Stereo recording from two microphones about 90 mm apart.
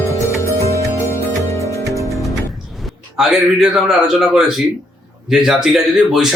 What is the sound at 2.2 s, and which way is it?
Music, centre (ahead or behind).